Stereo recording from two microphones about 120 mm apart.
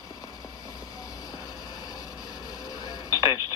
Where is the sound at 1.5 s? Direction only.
35° left (ahead or behind).